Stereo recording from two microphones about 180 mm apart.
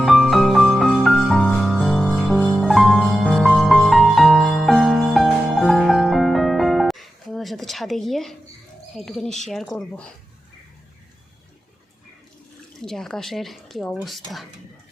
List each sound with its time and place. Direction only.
0.0 s music: centre (ahead or behind)
9.0 s speech: centre (ahead or behind)
12.8 s speech: centre (ahead or behind)